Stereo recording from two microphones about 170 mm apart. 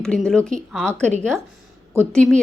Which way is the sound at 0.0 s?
5° left (ahead or behind).